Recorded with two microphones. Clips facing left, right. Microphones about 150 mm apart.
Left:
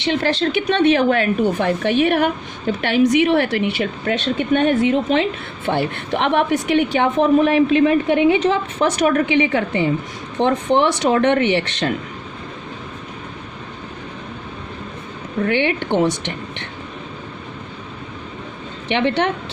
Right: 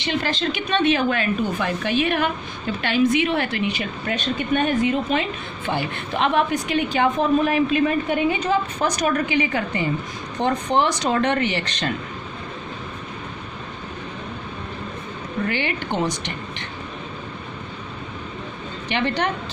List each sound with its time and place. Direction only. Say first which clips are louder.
0.0 s a woman's voice: left 5 dB; 65° left (ahead or behind)
5.7 s a woman's voice: left 4 dB; 65° left (ahead or behind)
15.4 s a woman's voice: left 8 dB; 65° left (ahead or behind)
18.9 s a woman's voice: left 5 dB; 65° left (ahead or behind)